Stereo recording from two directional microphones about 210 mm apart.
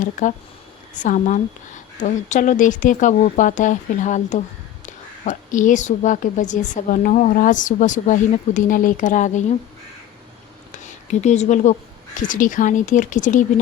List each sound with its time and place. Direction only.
0.0 s a woman's voice: 40° left (ahead or behind)
10.7 s a woman's voice: 35° left (ahead or behind)